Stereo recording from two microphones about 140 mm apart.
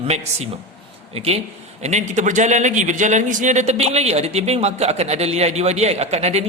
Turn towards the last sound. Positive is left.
turn(degrees=-50)  # may be behind; listen again after turning